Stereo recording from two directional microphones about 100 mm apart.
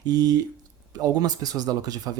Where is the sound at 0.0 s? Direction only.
40° right (ahead or behind).